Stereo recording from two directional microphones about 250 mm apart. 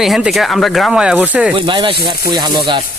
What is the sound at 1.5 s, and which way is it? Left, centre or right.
Speech, centre.